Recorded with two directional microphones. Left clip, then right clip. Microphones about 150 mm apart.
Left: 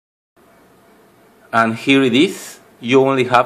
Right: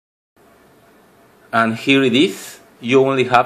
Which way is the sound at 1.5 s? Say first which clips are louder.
Left 1 dB; 5° left (ahead or behind).